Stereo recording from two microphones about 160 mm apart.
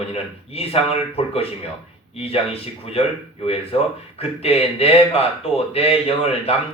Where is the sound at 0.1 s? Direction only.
40° left (ahead or behind).